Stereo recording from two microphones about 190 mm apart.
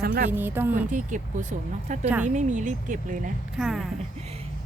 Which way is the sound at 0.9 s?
40° right (ahead or behind).